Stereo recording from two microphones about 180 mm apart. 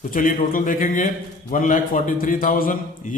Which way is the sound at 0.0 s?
50° left (ahead or behind).